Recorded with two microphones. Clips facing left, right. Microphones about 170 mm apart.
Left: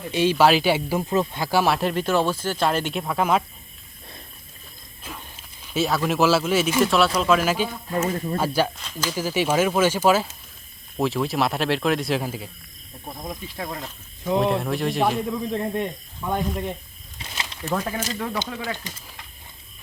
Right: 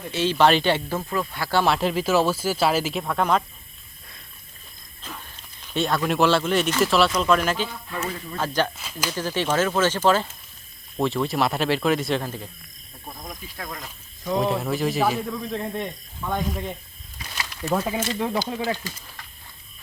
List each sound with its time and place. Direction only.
0.1 s speech: 15° left (ahead or behind)
5.7 s speech: 5° left (ahead or behind)
7.9 s speech: 40° left (ahead or behind)
8.4 s speech: 10° left (ahead or behind)
8.8 s speech: 5° right (ahead or behind)
9.0 s speech: 10° left (ahead or behind)
13.1 s speech: 25° left (ahead or behind)
14.4 s speech: centre (ahead or behind)
15.3 s speech: 10° left (ahead or behind)
17.2 s a sound: 25° left (ahead or behind)
17.7 s speech: 15° right (ahead or behind)